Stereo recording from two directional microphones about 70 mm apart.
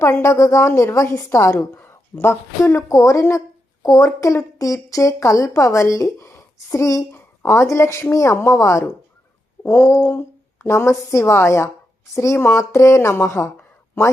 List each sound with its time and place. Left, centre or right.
0.0 s a woman's voice: left
2.9 s a woman's voice: left
13.6 s a sound: left